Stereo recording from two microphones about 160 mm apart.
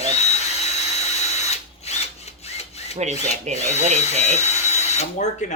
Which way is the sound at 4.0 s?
45° left (ahead or behind).